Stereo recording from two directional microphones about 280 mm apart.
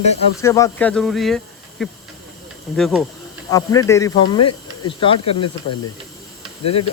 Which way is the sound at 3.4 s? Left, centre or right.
Centre.